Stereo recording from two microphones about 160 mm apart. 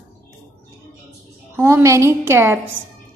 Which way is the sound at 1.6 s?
15° right (ahead or behind).